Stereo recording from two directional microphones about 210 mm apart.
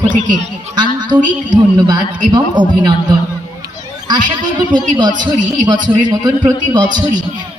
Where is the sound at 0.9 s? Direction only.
20° right (ahead or behind).